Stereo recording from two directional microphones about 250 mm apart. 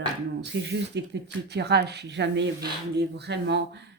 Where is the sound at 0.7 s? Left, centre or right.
Right.